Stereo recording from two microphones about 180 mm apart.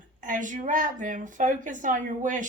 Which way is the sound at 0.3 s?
45° right (ahead or behind).